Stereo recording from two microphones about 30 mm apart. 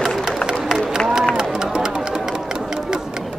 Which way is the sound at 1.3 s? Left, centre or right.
Right.